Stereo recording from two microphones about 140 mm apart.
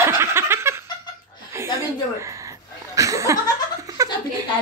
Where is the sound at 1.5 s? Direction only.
20° right (ahead or behind).